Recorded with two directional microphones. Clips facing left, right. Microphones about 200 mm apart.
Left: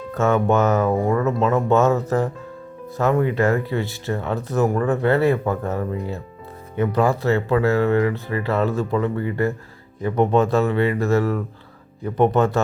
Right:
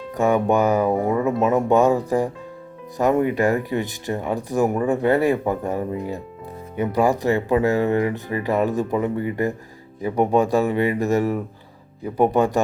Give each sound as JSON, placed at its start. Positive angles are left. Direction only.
{"t": 0.1, "sound": "speech", "side_deg": -15}